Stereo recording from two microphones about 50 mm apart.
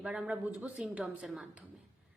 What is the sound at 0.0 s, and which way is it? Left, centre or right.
Speech, centre.